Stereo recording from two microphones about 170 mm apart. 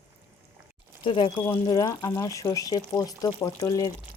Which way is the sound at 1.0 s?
30° left (ahead or behind).